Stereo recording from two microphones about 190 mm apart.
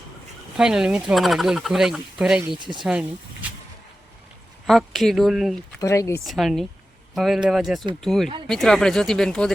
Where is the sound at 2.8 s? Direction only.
5° right (ahead or behind).